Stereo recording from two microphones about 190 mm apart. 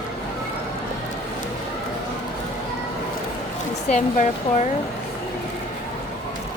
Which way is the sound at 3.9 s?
40° left (ahead or behind).